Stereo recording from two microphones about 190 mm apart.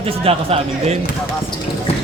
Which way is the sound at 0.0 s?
30° right (ahead or behind).